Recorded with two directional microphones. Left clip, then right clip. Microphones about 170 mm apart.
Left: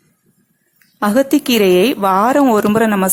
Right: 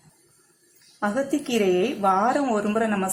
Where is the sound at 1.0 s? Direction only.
35° left (ahead or behind).